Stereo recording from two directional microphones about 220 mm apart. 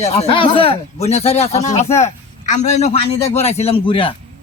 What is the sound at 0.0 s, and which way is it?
A man's voice, 30° left (ahead or behind).